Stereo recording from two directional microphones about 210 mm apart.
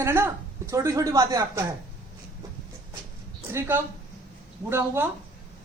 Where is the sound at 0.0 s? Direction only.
10° right (ahead or behind).